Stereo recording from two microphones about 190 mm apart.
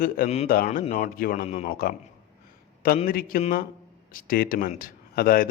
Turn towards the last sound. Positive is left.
turn(degrees=50)  # may be behind; listen again after turning